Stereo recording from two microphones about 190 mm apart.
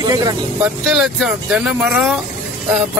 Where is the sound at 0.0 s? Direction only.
20° right (ahead or behind).